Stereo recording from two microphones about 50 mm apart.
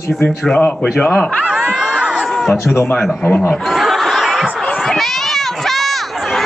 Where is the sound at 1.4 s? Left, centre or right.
Centre.